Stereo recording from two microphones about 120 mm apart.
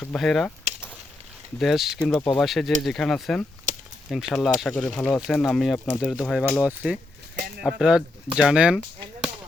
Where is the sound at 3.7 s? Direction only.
90° right.